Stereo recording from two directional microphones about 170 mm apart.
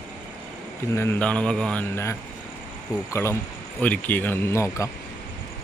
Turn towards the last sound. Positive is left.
turn(degrees=15)  # may be behind; listen again after turning